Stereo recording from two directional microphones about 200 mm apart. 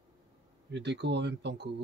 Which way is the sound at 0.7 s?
60° right (ahead or behind).